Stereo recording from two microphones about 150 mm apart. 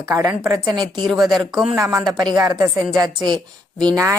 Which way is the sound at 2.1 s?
25° right (ahead or behind).